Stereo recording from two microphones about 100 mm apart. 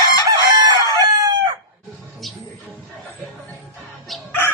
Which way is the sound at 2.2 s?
Centre (ahead or behind).